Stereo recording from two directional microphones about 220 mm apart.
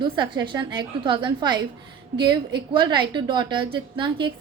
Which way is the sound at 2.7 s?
20° right (ahead or behind).